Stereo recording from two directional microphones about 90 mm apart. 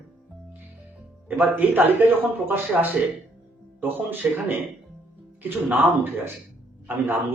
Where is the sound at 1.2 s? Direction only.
20° right (ahead or behind).